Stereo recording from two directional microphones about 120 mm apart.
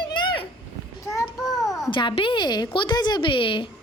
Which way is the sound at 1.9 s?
40° left (ahead or behind).